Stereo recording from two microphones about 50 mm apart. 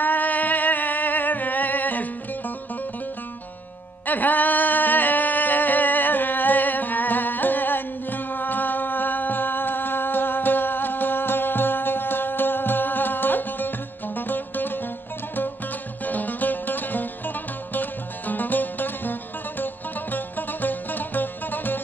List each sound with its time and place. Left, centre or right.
0.0 s music: left
4.0 s a sound: left
16.1 s music: left